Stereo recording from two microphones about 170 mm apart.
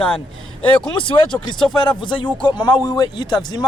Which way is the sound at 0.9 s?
30° left (ahead or behind).